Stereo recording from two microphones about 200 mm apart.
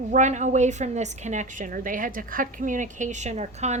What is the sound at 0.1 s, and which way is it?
A woman's voice, 35° right (ahead or behind).